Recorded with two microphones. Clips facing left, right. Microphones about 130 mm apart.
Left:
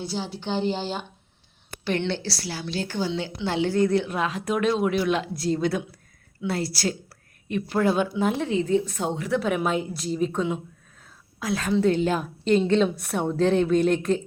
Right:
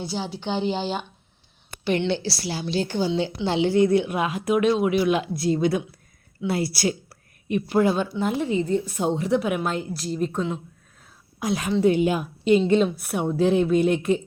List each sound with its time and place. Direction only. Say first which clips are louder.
0.0 s a woman's voice: right 1 dB; 20° right (ahead or behind)
1.8 s a woman's voice: right 3 dB; 10° right (ahead or behind)
7.9 s a woman's voice: left 1 dB; centre (ahead or behind)
9.0 s a woman's voice: right 4 dB; 20° right (ahead or behind)
9.6 s a woman's voice: left 1 dB; 5° left (ahead or behind)
11.3 s a woman's voice: right 1 dB; 20° right (ahead or behind)